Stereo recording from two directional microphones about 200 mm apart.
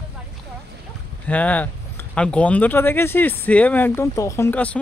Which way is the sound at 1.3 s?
5° left (ahead or behind).